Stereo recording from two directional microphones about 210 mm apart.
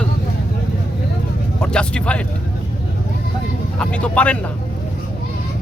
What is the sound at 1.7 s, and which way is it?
Speech, 5° left (ahead or behind).